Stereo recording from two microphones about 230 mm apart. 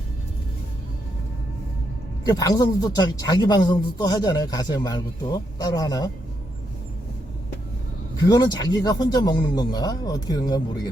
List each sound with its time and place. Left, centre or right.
2.2 s speech: centre
8.2 s speech: centre